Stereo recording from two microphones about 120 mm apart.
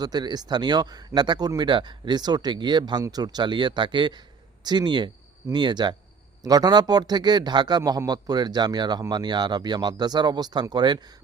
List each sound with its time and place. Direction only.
0.0 s speech: 35° right (ahead or behind)